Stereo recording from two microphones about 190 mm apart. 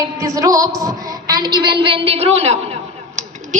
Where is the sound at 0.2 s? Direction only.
15° right (ahead or behind).